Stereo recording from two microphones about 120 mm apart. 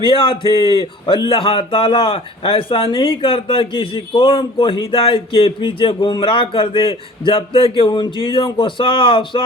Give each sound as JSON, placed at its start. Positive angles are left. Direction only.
{"t": 0.0, "sound": "speech", "side_deg": 45}